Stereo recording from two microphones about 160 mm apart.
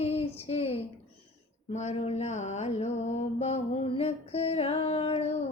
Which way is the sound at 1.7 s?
45° left (ahead or behind).